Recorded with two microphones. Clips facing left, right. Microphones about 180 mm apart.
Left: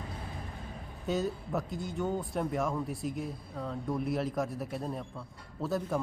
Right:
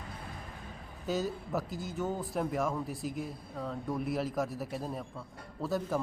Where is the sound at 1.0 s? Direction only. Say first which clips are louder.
Left 1 dB; centre (ahead or behind).